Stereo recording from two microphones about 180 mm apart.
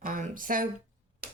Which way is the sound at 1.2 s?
55° right (ahead or behind).